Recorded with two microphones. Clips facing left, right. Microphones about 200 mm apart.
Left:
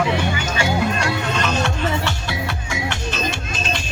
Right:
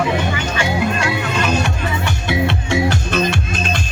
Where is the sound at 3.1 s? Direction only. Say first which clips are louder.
Right 6 dB; 60° right (ahead or behind).